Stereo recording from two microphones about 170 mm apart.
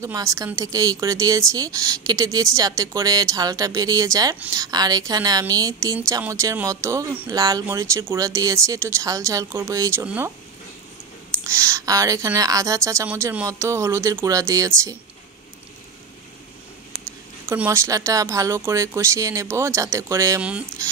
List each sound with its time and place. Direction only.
0.0 s speech: 20° right (ahead or behind)
11.4 s speech: 15° right (ahead or behind)
17.5 s speech: 15° right (ahead or behind)